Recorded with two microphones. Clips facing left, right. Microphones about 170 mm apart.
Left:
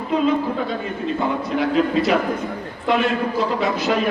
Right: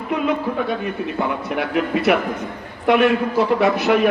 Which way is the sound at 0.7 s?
65° right (ahead or behind).